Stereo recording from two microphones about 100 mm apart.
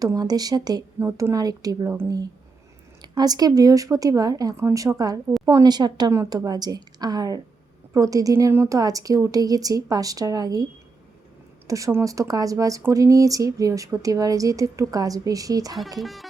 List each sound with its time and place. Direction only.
0.0 s a woman's voice: 40° right (ahead or behind)
0.9 s a woman's voice: 30° right (ahead or behind)
3.0 s a woman's voice: 40° right (ahead or behind)
6.1 s a woman's voice: 35° right (ahead or behind)
11.7 s a woman's voice: 30° right (ahead or behind)
16.0 s speech: centre (ahead or behind)